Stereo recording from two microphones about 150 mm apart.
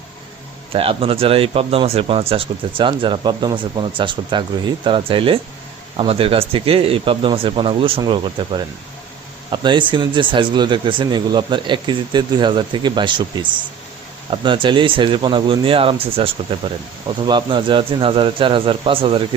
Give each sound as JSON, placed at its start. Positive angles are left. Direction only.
{"t": 0.7, "sound": "speech", "side_deg": -40}